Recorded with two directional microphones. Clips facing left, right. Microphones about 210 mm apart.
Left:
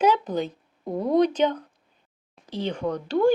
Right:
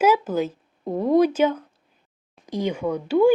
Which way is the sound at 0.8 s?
20° right (ahead or behind).